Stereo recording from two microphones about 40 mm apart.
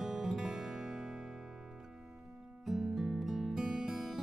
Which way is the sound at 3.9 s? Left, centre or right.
Centre.